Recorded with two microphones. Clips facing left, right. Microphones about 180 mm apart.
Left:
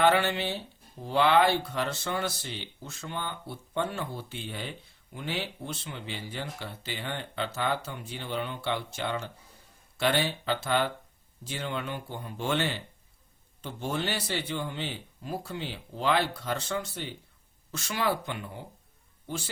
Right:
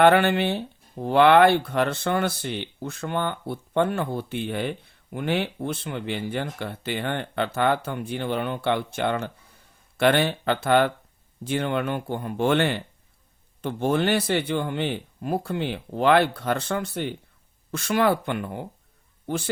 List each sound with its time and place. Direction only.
0.0 s speech: 60° right (ahead or behind)